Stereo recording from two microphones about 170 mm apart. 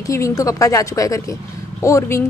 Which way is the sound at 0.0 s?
20° left (ahead or behind).